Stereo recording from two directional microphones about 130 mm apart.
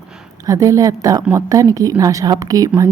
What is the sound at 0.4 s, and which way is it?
A woman's voice, 25° right (ahead or behind).